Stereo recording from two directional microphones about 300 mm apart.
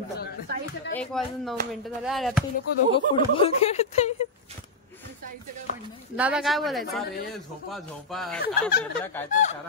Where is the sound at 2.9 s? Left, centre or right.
Centre.